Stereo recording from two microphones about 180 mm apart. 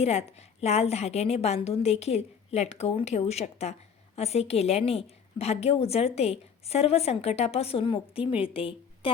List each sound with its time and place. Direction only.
0.0 s a woman's voice: 35° left (ahead or behind)